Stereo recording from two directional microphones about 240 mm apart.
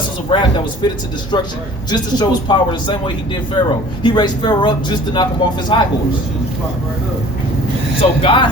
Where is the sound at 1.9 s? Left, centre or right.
Centre.